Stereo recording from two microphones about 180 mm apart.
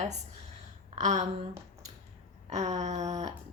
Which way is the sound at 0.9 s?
40° right (ahead or behind).